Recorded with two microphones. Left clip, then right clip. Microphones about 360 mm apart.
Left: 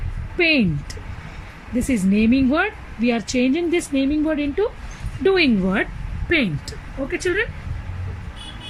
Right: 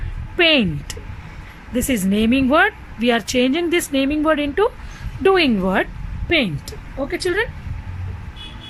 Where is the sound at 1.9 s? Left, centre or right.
Centre.